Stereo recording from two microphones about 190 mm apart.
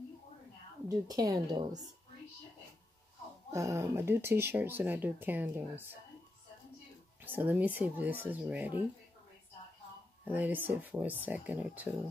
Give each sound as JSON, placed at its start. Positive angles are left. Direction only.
{"t": 0.8, "sound": "a woman's voice", "side_deg": -20}
{"t": 3.5, "sound": "speech", "side_deg": -15}
{"t": 7.2, "sound": "speech", "side_deg": -10}
{"t": 10.2, "sound": "speech", "side_deg": -10}